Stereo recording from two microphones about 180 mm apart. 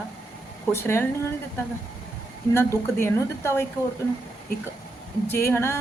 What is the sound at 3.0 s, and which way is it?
Speech, 15° left (ahead or behind).